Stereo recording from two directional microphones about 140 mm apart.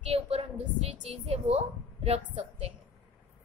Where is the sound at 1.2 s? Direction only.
45° right (ahead or behind).